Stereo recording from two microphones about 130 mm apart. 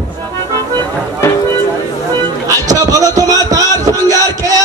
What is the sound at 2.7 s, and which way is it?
Music, 30° right (ahead or behind).